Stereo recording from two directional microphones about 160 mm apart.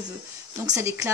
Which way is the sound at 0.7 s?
20° right (ahead or behind).